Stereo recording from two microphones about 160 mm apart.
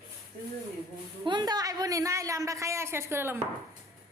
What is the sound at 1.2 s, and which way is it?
A child's voice, 25° right (ahead or behind).